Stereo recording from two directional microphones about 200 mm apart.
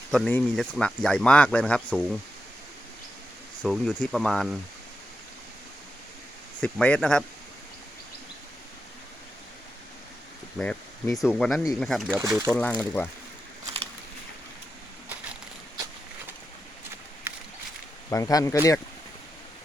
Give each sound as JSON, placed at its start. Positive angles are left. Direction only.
{"t": 0.1, "sound": "speech", "side_deg": 5}
{"t": 3.6, "sound": "speech", "side_deg": 0}
{"t": 6.6, "sound": "speech", "side_deg": 5}
{"t": 10.6, "sound": "speech", "side_deg": 5}
{"t": 12.2, "sound": "speech", "side_deg": -15}
{"t": 12.8, "sound": "speech", "side_deg": 10}
{"t": 17.3, "sound": "a sound", "side_deg": -15}
{"t": 18.1, "sound": "speech", "side_deg": 15}